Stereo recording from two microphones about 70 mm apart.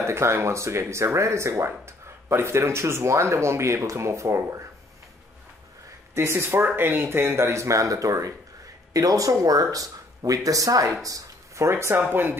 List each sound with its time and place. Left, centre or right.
0.0 s speech: right
6.1 s speech: right